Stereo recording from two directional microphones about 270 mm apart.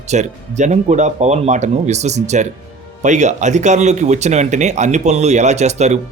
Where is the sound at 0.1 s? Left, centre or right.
Right.